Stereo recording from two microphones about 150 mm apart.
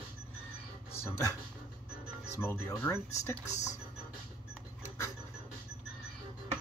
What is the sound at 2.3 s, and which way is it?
Speech, 15° left (ahead or behind).